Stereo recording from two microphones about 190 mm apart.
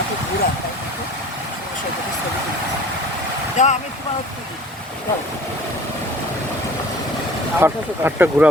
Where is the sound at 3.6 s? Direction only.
40° left (ahead or behind).